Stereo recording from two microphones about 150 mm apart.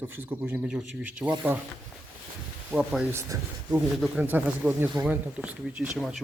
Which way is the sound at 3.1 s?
20° right (ahead or behind).